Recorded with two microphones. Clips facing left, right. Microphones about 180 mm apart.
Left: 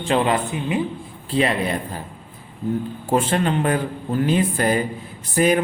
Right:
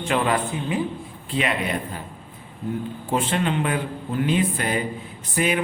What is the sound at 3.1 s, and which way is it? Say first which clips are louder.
Speech: left 4 dB; 45° left (ahead or behind).